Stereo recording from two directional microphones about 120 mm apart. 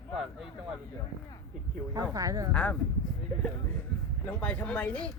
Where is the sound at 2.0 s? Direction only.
30° right (ahead or behind).